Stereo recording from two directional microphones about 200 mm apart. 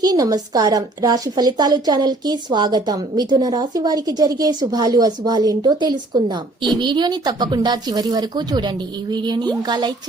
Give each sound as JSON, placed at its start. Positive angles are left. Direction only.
{"t": 0.0, "sound": "a woman's voice", "side_deg": -20}